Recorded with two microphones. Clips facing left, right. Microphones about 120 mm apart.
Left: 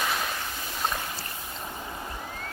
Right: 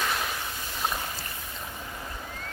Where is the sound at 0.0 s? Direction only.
Centre (ahead or behind).